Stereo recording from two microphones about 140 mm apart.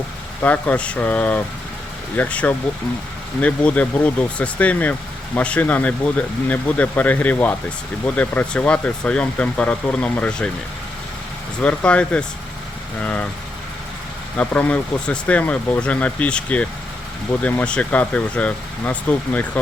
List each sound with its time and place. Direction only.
0.4 s speech: 10° left (ahead or behind)
11.6 s speech: 10° left (ahead or behind)
14.3 s speech: 10° left (ahead or behind)